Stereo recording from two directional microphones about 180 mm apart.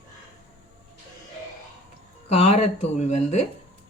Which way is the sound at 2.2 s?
35° left (ahead or behind).